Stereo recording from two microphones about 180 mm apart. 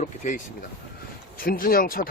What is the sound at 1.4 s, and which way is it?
Speech, 55° left (ahead or behind).